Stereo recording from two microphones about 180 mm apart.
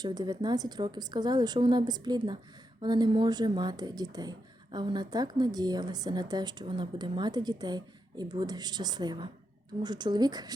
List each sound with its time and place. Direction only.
0.0 s speech: 25° right (ahead or behind)